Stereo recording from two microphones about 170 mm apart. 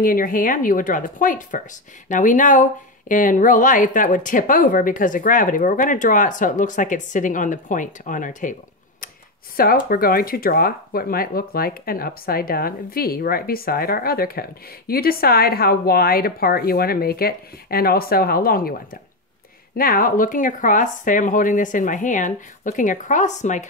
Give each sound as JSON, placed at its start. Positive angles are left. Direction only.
{"t": 0.0, "sound": "speech", "side_deg": 55}
{"t": 9.8, "sound": "speech", "side_deg": 60}
{"t": 19.8, "sound": "speech", "side_deg": 55}